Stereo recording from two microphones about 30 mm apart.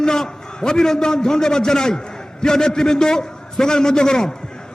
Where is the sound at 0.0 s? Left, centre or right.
Left.